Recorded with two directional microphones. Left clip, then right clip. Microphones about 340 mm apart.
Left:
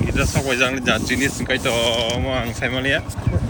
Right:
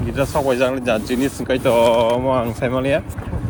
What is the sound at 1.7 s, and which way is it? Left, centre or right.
Speech, right.